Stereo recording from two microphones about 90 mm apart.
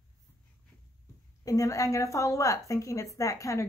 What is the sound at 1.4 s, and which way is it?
Speech, 40° left (ahead or behind).